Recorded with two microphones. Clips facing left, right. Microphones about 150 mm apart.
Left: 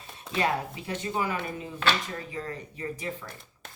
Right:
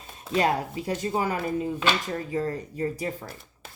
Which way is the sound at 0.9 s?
35° right (ahead or behind).